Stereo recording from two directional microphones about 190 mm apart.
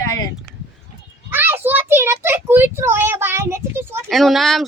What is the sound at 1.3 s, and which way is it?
A child's voice, 10° right (ahead or behind).